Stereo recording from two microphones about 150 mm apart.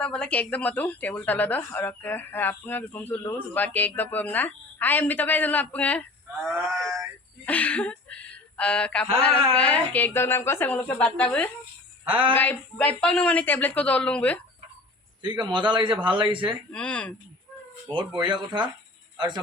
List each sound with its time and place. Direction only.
0.0 s a woman's voice: 5° left (ahead or behind)
6.5 s speech: 5° right (ahead or behind)
7.4 s a woman's voice: 10° left (ahead or behind)
15.2 s speech: 30° right (ahead or behind)
16.7 s a woman's voice: 10° left (ahead or behind)
17.8 s speech: 30° right (ahead or behind)